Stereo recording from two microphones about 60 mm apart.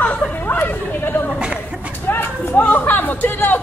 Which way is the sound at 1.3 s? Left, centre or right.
Centre.